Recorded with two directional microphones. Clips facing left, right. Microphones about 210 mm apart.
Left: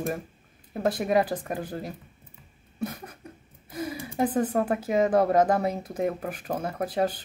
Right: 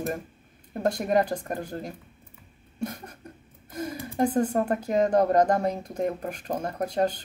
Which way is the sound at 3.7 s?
5° left (ahead or behind).